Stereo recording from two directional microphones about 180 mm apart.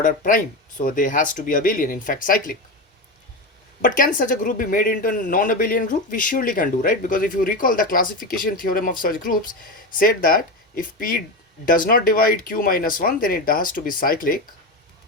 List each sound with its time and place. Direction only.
0.0 s speech: 50° left (ahead or behind)
3.8 s speech: 50° left (ahead or behind)